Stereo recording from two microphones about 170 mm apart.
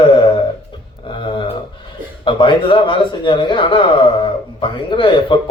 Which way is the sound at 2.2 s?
30° left (ahead or behind).